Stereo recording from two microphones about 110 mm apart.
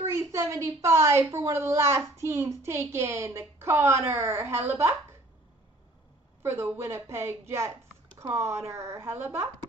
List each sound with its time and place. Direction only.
0.0 s a woman's voice: 25° right (ahead or behind)
6.4 s a woman's voice: 20° right (ahead or behind)